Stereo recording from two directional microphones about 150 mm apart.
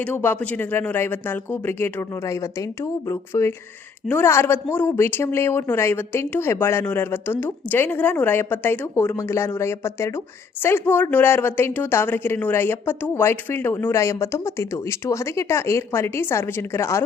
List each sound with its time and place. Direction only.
0.0 s a woman's voice: 10° left (ahead or behind)